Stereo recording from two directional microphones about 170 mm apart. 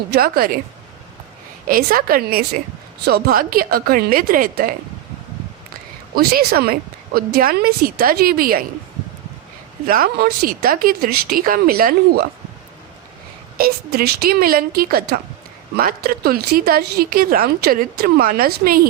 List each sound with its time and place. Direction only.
0.1 s speech: 60° right (ahead or behind)
1.6 s speech: 55° right (ahead or behind)
6.1 s speech: 65° right (ahead or behind)
9.8 s speech: 55° right (ahead or behind)
13.6 s speech: 65° right (ahead or behind)